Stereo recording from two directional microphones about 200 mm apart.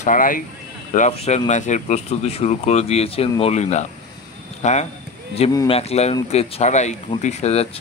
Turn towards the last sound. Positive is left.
turn(degrees=30)  # may be behind; listen again after turning